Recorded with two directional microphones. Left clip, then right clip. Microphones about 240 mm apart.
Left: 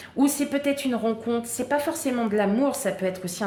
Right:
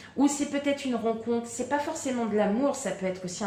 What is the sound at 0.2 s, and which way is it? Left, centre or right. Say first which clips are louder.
A woman's voice: left 3 dB; left.